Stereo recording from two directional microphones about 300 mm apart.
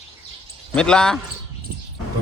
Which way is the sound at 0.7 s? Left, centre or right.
Centre.